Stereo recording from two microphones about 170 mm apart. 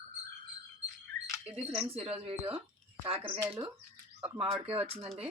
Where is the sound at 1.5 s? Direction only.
35° right (ahead or behind).